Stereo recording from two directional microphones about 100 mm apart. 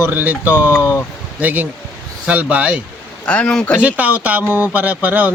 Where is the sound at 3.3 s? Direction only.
10° left (ahead or behind).